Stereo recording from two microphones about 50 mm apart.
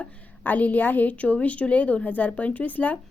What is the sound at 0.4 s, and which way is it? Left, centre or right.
Speech, left.